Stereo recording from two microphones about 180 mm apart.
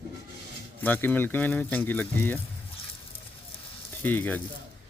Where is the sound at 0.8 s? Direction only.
10° left (ahead or behind).